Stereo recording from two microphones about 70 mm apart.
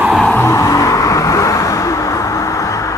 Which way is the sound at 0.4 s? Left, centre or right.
Left.